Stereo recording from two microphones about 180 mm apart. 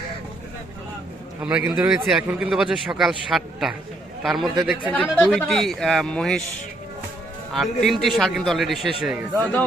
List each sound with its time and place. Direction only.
1.4 s a man's voice: 10° right (ahead or behind)
7.5 s a man's voice: centre (ahead or behind)
9.4 s speech: 10° left (ahead or behind)